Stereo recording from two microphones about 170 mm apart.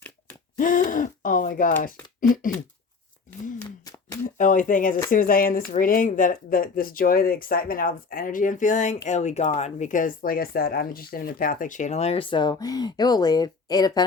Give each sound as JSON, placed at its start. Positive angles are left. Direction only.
{"t": 0.5, "sound": "speech", "side_deg": 50}
{"t": 4.2, "sound": "speech", "side_deg": 50}